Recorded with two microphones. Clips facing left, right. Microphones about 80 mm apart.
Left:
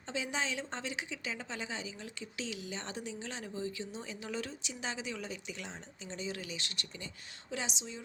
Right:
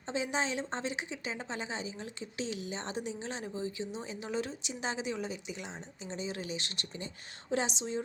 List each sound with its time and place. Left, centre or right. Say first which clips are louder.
0.1 s speech: right 4 dB; right